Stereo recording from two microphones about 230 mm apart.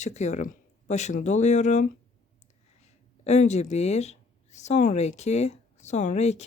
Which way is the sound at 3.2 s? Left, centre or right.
Left.